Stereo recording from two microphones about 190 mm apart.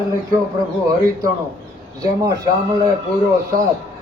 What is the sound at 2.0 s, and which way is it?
Speech, 20° right (ahead or behind).